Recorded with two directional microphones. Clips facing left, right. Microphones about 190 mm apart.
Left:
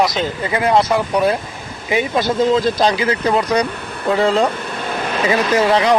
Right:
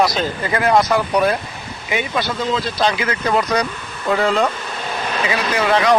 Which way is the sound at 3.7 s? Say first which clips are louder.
Left 4 dB; 60° left (ahead or behind).